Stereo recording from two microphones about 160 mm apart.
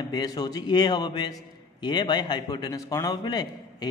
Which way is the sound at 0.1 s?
25° left (ahead or behind).